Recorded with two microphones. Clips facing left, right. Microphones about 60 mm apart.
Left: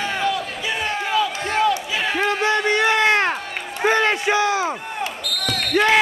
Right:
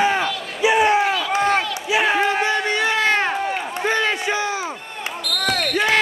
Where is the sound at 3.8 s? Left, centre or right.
Centre.